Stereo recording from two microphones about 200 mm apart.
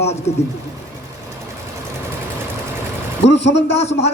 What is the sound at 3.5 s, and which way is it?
Speech, 30° left (ahead or behind).